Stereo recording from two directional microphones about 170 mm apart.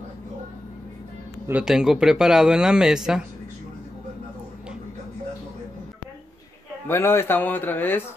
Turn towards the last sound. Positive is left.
turn(degrees=10)  # may be behind; listen again after turning